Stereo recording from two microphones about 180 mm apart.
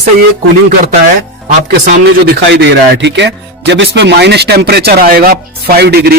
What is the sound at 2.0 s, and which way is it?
Speech, 65° right (ahead or behind).